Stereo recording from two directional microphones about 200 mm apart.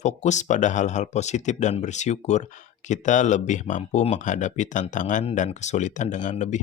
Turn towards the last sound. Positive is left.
turn(degrees=35)  # may be behind; listen again after turning